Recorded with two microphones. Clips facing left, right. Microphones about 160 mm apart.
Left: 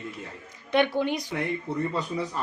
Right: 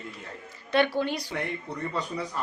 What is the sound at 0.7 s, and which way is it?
Speech, 15° left (ahead or behind).